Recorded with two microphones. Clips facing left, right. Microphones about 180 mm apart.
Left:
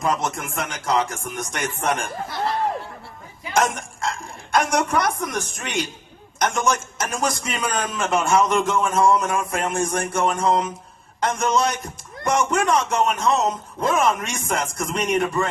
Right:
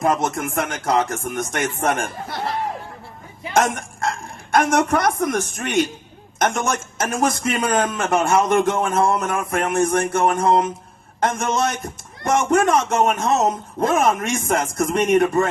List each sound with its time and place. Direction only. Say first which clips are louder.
0.0 s a man's voice: right 4 dB; 55° right (ahead or behind)
3.8 s a man's voice: right 3 dB; 55° right (ahead or behind)